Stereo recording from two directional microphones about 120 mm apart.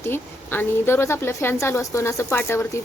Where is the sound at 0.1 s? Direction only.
20° left (ahead or behind).